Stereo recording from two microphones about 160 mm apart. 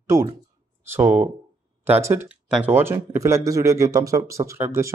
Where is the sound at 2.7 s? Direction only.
15° right (ahead or behind).